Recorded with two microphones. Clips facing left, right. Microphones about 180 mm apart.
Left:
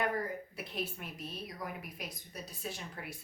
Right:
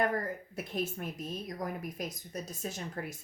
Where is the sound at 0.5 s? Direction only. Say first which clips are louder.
Right 5 dB; 45° right (ahead or behind).